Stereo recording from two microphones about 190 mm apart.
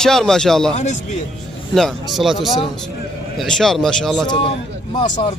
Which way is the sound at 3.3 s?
5° left (ahead or behind).